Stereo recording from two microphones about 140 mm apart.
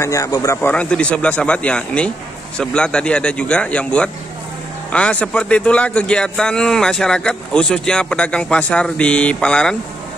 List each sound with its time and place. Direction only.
0.0 s a man's voice: 25° left (ahead or behind)
0.6 s a man's voice: 10° left (ahead or behind)